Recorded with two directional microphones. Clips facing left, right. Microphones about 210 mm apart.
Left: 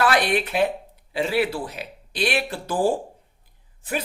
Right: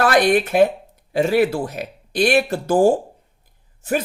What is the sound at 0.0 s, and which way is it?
Speech, 45° right (ahead or behind).